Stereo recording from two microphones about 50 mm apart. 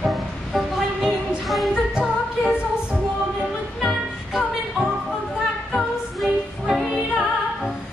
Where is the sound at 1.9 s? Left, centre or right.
Right.